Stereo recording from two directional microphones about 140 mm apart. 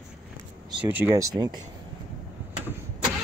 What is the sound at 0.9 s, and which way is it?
Speech, 10° right (ahead or behind).